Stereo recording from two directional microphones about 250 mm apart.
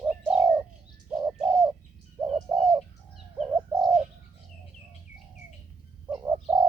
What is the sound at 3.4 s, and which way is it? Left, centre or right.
Bird, centre.